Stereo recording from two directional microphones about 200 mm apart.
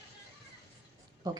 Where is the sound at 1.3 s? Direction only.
20° right (ahead or behind).